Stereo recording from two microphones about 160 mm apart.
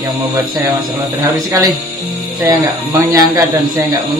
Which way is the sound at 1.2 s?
20° right (ahead or behind).